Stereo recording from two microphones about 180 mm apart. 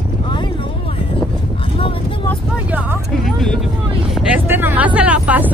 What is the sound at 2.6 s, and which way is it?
Speech, 10° right (ahead or behind).